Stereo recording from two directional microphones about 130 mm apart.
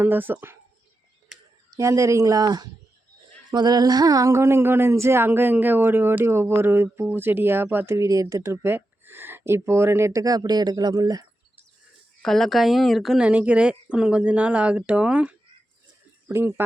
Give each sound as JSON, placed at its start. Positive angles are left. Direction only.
{"t": 0.0, "sound": "speech", "side_deg": -15}
{"t": 1.7, "sound": "speech", "side_deg": -25}
{"t": 12.2, "sound": "speech", "side_deg": 5}